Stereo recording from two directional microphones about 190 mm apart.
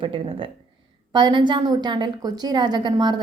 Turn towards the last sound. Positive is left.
turn(degrees=-25)  # may be behind; listen again after turning